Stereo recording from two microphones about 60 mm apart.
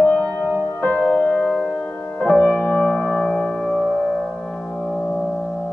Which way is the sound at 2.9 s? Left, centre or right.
Centre.